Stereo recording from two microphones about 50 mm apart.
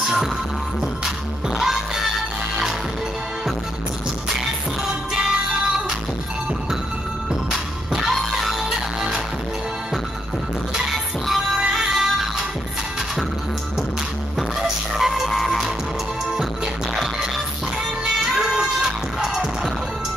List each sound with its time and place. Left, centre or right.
0.0 s music: centre
1.6 s music: centre
5.1 s music: centre
7.9 s music: centre
11.6 s music: centre
15.0 s music: centre
18.0 s music: centre